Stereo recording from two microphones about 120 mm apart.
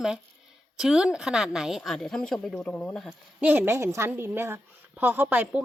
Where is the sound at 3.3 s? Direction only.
15° right (ahead or behind).